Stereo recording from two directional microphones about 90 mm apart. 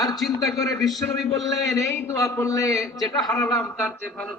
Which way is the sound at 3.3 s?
35° left (ahead or behind).